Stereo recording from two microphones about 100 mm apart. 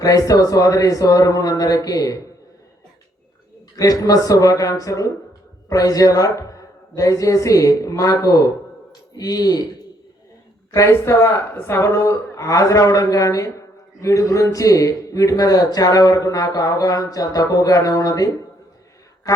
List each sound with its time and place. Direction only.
0.0 s a man's voice: 35° left (ahead or behind)
3.8 s a man's voice: 35° left (ahead or behind)
10.7 s a man's voice: 30° left (ahead or behind)